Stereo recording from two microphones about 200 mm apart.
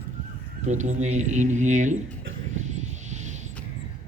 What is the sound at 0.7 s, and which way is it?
Music, 35° right (ahead or behind).